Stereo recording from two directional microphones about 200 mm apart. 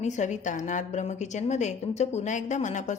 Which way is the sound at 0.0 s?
35° left (ahead or behind).